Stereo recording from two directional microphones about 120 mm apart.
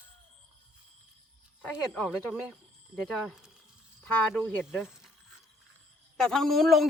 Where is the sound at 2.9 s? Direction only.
Centre (ahead or behind).